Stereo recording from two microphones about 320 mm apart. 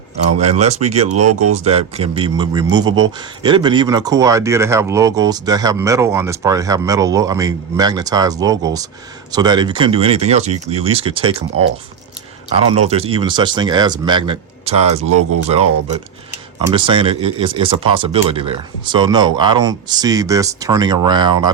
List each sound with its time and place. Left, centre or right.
0.3 s speech: right
1.1 s speech: right
1.5 s speech: centre
15.0 s speech: right
16.6 s speech: centre